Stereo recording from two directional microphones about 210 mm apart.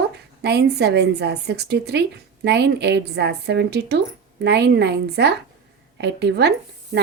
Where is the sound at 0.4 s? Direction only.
50° right (ahead or behind).